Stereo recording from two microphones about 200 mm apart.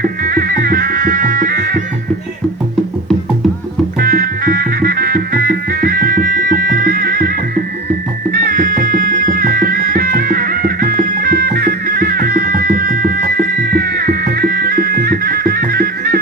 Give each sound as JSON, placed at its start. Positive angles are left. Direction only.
{"t": 0.0, "sound": "music", "side_deg": -45}
{"t": 4.0, "sound": "music", "side_deg": -45}